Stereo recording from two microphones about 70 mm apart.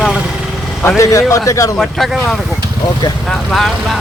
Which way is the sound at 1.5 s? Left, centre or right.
Left.